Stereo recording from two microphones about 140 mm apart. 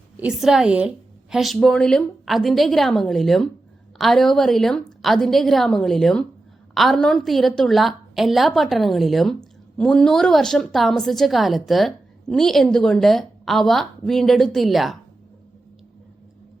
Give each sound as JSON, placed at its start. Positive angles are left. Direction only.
{"t": 0.2, "sound": "a woman's voice", "side_deg": -5}